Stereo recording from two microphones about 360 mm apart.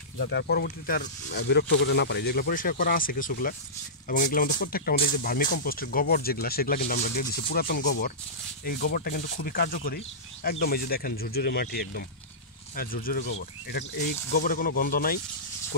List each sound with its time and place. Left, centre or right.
0.2 s speech: left